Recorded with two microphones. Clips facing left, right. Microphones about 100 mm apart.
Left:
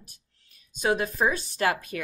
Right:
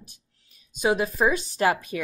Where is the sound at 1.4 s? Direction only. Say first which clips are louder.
Right 3 dB; 25° right (ahead or behind).